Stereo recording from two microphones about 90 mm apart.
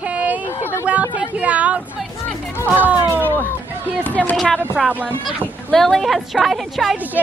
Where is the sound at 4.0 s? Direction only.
15° left (ahead or behind).